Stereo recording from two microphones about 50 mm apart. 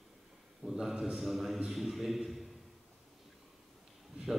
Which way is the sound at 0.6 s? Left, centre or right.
Centre.